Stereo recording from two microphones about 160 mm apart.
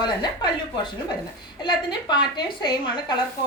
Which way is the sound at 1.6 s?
30° left (ahead or behind).